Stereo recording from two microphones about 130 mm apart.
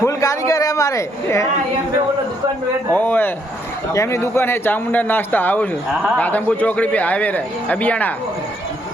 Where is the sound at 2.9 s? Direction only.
15° left (ahead or behind).